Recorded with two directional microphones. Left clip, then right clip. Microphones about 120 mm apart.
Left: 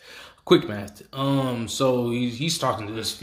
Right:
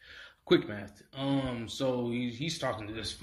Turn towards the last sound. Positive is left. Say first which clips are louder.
# left 9 dB
turn(degrees=30)  # may be behind; listen again after turning